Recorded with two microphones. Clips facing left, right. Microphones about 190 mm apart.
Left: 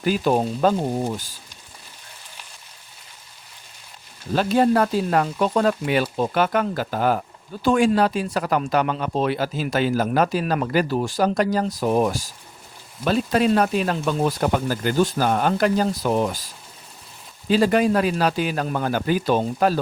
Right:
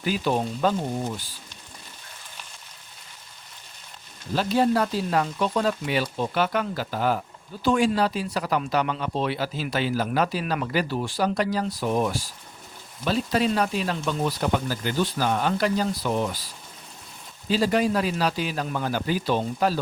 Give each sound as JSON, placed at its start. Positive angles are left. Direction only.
{"t": 0.0, "sound": "speech", "side_deg": 45}
{"t": 4.4, "sound": "speech", "side_deg": 55}
{"t": 13.1, "sound": "speech", "side_deg": 50}
{"t": 17.5, "sound": "speech", "side_deg": 55}